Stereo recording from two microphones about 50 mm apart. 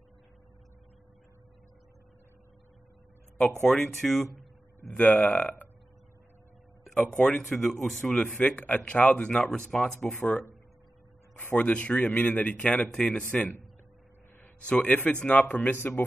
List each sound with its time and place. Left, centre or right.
3.7 s speech: centre
4.9 s speech: left
6.9 s speech: centre
8.1 s speech: left
9.4 s speech: centre
10.0 s speech: left
11.5 s speech: left
12.9 s speech: centre
14.7 s speech: left
15.4 s speech: left